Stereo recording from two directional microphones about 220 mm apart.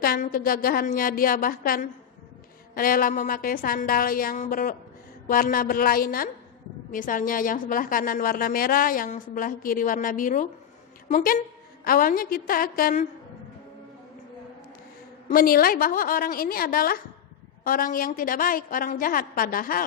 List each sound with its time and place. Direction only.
0.0 s a woman's voice: 40° left (ahead or behind)
15.3 s a woman's voice: 40° left (ahead or behind)